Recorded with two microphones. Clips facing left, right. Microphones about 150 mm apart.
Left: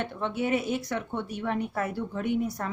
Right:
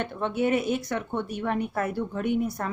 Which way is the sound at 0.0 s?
50° right (ahead or behind).